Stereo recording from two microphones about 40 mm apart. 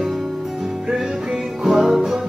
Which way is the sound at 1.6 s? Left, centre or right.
Centre.